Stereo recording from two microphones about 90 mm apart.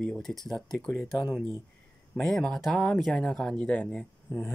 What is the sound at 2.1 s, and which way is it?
Speech, 5° left (ahead or behind).